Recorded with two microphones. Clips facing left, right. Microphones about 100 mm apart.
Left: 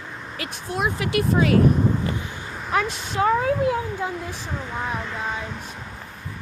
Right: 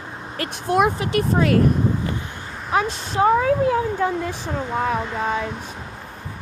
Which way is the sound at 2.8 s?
40° right (ahead or behind).